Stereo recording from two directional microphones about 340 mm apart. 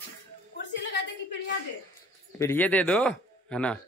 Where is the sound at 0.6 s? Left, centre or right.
Left.